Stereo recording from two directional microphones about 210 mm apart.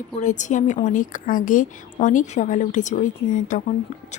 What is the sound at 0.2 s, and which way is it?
A woman's voice, 35° left (ahead or behind).